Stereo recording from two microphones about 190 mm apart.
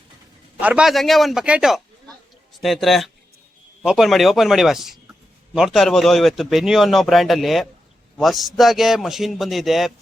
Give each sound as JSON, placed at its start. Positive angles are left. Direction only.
{"t": 0.6, "sound": "a man's voice", "side_deg": -5}